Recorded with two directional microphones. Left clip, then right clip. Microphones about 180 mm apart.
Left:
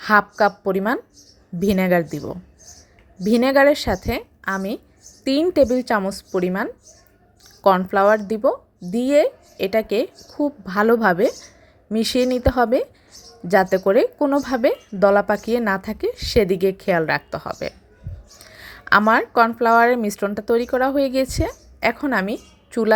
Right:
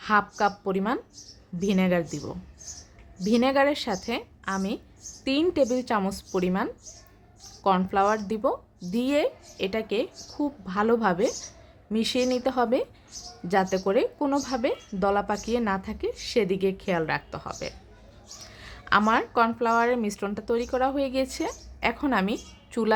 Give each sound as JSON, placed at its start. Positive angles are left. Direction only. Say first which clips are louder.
{"t": 0.0, "sound": "a woman's voice", "louder": "left 7 dB", "side_deg": 25}
{"t": 7.8, "sound": "a woman's voice", "louder": "left 7 dB", "side_deg": 20}